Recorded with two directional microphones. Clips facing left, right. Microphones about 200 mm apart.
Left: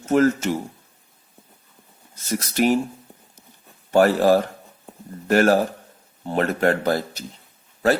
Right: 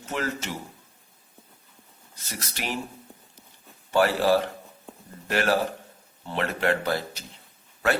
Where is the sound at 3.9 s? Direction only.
45° left (ahead or behind).